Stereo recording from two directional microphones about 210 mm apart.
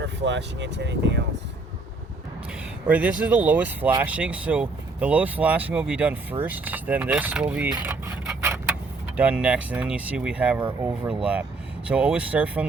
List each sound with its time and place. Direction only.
0.0 s speech: 55° right (ahead or behind)
2.8 s speech: 5° right (ahead or behind)